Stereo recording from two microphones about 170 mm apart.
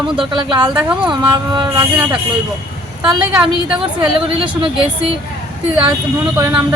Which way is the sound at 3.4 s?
30° right (ahead or behind).